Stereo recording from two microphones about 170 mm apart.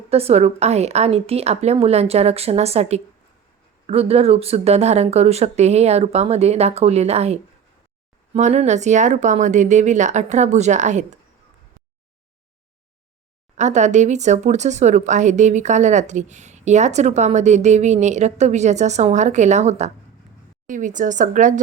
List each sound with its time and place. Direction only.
0.1 s speech: 35° right (ahead or behind)
13.6 s speech: 45° right (ahead or behind)